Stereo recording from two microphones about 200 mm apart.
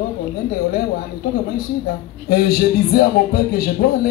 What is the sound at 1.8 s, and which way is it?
Speech, 50° left (ahead or behind).